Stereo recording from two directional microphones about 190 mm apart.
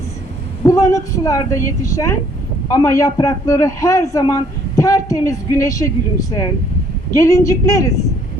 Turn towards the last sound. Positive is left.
turn(degrees=15)  # may be behind; listen again after turning